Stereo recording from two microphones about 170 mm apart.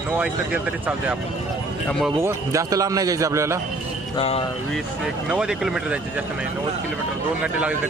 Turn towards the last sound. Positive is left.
turn(degrees=-5)  # may be behind; listen again after turning